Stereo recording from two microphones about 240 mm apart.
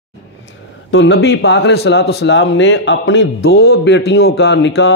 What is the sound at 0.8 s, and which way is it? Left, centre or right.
A man's voice, left.